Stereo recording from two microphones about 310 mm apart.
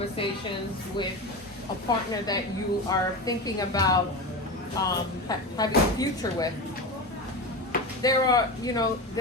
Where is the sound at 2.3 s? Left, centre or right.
Centre.